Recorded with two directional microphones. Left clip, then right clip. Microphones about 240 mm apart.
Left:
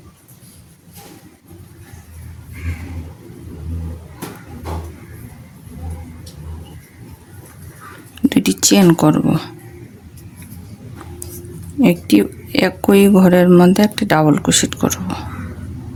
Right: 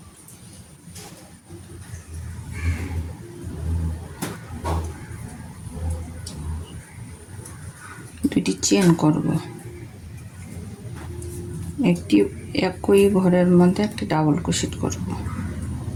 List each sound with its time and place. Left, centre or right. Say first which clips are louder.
8.3 s a woman's voice: left 6 dB; left
11.8 s a woman's voice: left 6 dB; left